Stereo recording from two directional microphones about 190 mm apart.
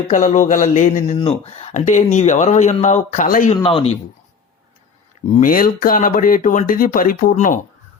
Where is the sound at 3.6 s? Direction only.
30° left (ahead or behind).